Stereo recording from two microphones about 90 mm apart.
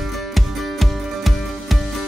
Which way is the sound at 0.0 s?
Centre (ahead or behind).